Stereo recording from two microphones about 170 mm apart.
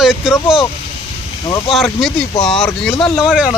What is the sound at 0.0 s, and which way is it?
Speech, centre (ahead or behind).